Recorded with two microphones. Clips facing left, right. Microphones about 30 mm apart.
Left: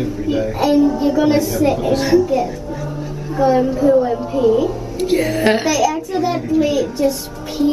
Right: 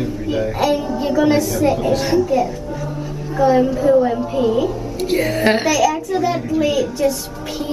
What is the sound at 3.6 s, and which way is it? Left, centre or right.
A woman's voice, centre.